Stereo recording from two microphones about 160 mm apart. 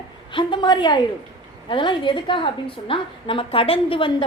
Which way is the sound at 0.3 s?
30° left (ahead or behind).